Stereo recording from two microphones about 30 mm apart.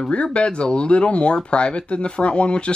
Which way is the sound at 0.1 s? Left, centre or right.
Left.